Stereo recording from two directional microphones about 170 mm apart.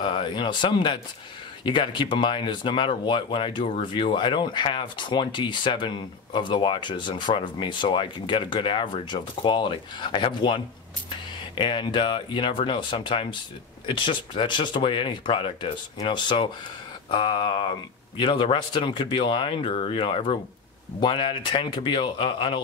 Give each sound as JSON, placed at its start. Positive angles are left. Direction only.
{"t": 0.0, "sound": "speech", "side_deg": 30}